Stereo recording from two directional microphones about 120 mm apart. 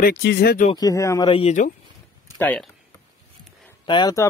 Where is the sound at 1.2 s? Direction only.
50° left (ahead or behind).